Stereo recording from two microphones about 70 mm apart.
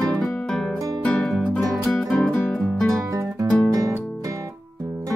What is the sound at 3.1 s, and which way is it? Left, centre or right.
Music, right.